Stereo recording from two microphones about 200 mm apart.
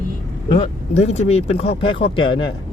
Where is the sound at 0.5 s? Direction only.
30° left (ahead or behind).